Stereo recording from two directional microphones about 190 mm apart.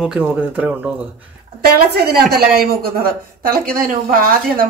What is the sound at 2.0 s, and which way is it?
A woman's voice, 55° right (ahead or behind).